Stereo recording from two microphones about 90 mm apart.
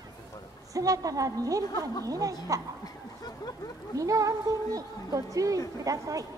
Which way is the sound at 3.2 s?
45° left (ahead or behind).